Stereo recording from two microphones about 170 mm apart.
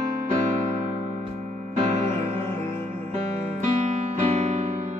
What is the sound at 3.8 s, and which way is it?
Music, 45° right (ahead or behind).